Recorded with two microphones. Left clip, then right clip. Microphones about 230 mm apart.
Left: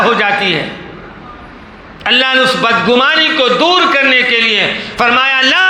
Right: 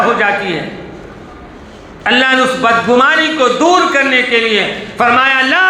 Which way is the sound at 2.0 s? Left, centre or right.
Left.